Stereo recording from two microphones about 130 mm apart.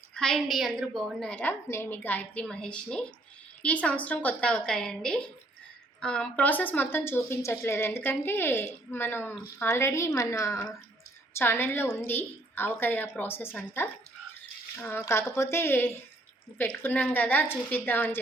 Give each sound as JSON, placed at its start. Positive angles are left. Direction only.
{"t": 0.1, "sound": "speech", "side_deg": 5}